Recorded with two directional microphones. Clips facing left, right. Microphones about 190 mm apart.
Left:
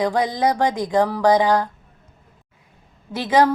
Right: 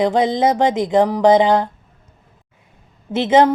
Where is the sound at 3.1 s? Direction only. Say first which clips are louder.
Right 4 dB; 25° right (ahead or behind).